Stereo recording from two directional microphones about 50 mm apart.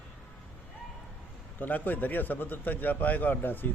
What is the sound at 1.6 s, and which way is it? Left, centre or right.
A man's voice, left.